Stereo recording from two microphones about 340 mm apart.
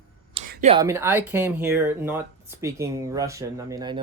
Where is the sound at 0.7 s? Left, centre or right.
Centre.